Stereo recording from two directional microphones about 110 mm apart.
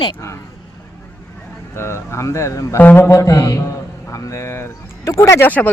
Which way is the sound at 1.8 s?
25° left (ahead or behind).